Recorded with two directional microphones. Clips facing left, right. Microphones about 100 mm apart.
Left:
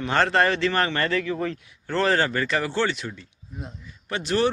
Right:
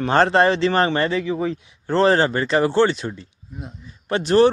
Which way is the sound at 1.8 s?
30° right (ahead or behind).